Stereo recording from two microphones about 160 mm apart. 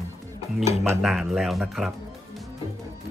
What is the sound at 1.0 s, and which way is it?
Speech, centre (ahead or behind).